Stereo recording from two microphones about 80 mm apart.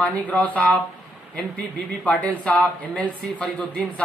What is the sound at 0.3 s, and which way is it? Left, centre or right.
Speech, centre.